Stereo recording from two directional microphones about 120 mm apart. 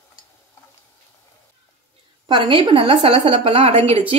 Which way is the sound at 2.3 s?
45° right (ahead or behind).